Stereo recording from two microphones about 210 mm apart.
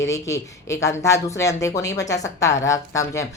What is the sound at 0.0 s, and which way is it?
A woman's voice, 15° left (ahead or behind).